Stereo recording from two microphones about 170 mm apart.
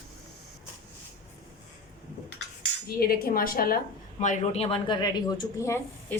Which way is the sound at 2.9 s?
60° left (ahead or behind).